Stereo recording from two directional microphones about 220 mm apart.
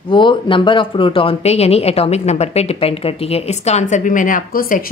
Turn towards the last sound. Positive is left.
turn(degrees=40)  # may be behind; listen again after turning